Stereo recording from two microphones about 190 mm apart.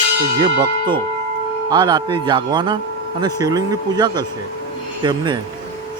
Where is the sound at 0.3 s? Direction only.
25° right (ahead or behind).